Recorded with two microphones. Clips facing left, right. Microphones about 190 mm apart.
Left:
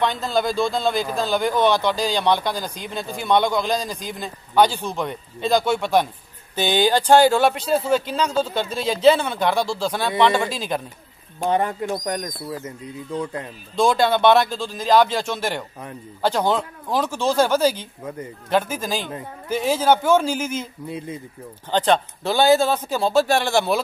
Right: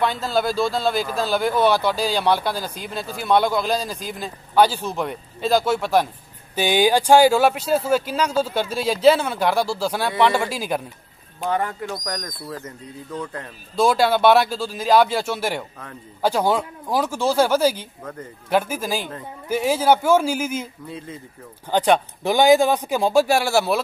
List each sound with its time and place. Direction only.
0.0 s a man's voice: 5° right (ahead or behind)
11.3 s speech: 20° left (ahead or behind)
13.7 s speech: 5° right (ahead or behind)
21.6 s speech: 10° right (ahead or behind)